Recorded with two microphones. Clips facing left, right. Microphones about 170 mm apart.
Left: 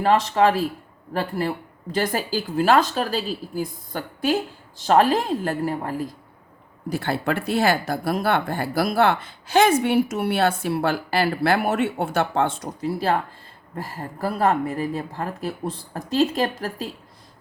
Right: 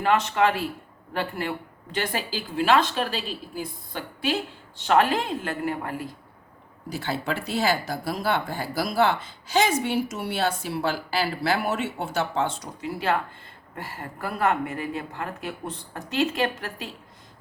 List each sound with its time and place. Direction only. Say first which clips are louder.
0.0 s speech: left 4 dB; 35° left (ahead or behind)
6.9 s speech: left 4 dB; 55° left (ahead or behind)
12.8 s speech: left 3 dB; 35° left (ahead or behind)